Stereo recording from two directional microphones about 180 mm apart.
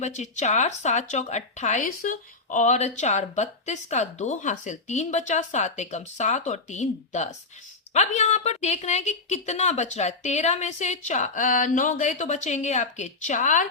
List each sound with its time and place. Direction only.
0.0 s speech: 40° left (ahead or behind)